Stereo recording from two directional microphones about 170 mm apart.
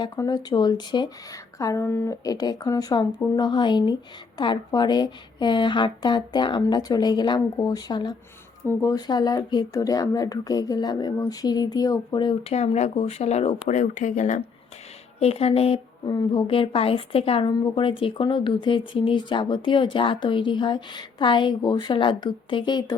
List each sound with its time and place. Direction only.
0.0 s a woman's voice: 25° left (ahead or behind)